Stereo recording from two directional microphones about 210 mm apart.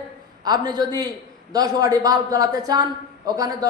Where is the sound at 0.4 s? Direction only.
20° right (ahead or behind).